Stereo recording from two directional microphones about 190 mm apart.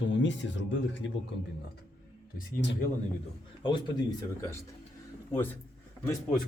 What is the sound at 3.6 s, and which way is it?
Speech, 25° left (ahead or behind).